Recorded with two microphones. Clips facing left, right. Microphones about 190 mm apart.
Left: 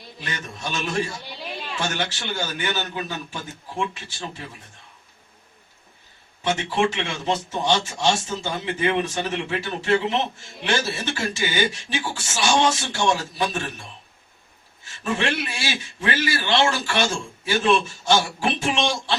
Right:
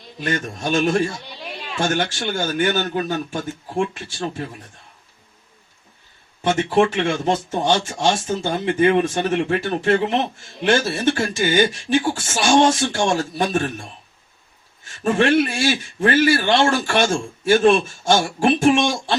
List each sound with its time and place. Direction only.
0.2 s a man's voice: 50° right (ahead or behind)
6.4 s a man's voice: 50° right (ahead or behind)
14.8 s a man's voice: 50° right (ahead or behind)